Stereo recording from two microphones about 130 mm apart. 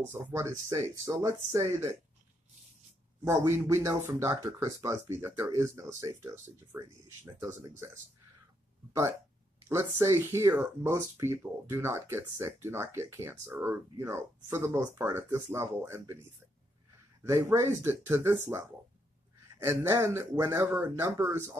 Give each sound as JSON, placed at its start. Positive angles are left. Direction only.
{"t": 0.0, "sound": "speech", "side_deg": -20}
{"t": 3.3, "sound": "speech", "side_deg": -20}
{"t": 9.7, "sound": "speech", "side_deg": -25}
{"t": 19.6, "sound": "speech", "side_deg": -20}